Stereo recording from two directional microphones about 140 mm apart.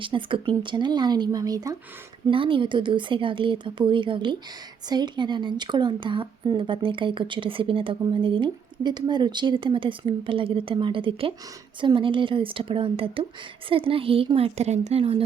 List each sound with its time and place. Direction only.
0.0 s speech: 35° right (ahead or behind)
2.2 s a woman's voice: 40° right (ahead or behind)